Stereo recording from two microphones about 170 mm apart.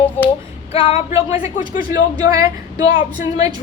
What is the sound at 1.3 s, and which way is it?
Speech, 50° left (ahead or behind).